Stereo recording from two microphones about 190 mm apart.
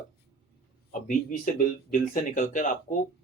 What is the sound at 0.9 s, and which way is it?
Speech, 45° left (ahead or behind).